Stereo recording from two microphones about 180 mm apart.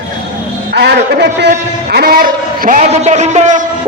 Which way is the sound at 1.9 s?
55° right (ahead or behind).